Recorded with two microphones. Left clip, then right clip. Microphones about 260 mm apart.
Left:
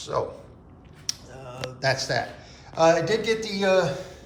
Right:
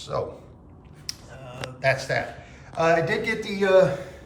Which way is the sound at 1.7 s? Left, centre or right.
Centre.